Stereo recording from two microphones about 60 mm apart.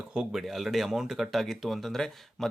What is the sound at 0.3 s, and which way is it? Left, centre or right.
Speech, centre.